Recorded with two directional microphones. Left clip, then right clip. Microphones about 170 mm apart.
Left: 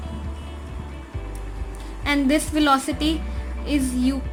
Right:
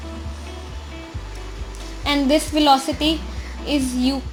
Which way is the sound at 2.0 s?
10° right (ahead or behind).